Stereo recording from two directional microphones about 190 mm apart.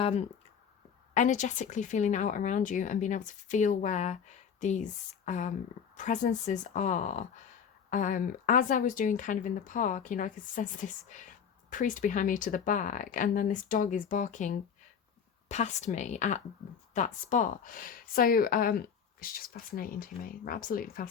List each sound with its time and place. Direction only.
0.0 s speech: 35° left (ahead or behind)